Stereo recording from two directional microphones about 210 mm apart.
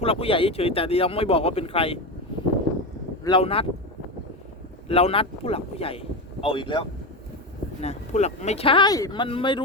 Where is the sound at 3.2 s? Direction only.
25° left (ahead or behind).